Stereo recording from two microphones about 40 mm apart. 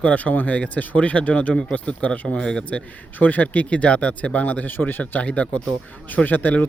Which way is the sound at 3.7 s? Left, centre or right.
Left.